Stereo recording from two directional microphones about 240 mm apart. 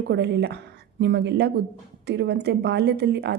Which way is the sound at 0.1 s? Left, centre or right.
Right.